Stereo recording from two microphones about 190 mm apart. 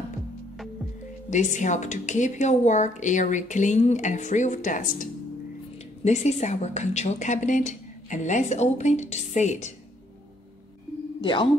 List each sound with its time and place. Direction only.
1.3 s a woman's voice: 40° left (ahead or behind)